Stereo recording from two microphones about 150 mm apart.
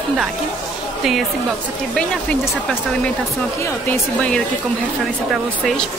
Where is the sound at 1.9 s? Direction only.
5° left (ahead or behind).